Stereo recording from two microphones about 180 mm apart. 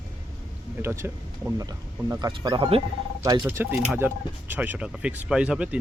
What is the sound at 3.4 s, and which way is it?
Speech, 10° right (ahead or behind).